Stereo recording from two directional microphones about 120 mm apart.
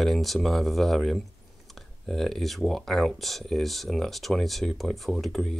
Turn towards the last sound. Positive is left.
turn(degrees=0)  # may be behind; listen again after turning